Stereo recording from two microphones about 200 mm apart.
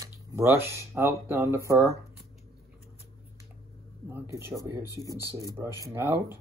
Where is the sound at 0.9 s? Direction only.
10° right (ahead or behind).